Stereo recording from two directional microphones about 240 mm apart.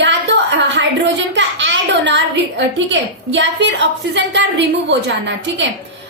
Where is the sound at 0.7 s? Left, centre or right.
Right.